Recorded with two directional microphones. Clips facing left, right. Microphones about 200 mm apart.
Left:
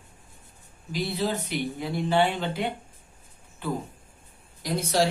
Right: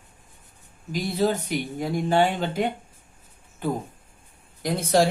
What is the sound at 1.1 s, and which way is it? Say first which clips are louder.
Speech: right 7 dB; 45° right (ahead or behind).